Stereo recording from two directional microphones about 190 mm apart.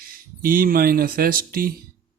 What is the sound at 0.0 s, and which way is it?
Speech, 50° right (ahead or behind).